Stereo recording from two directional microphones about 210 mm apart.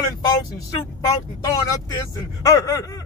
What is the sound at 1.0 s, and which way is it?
Speech, 15° left (ahead or behind).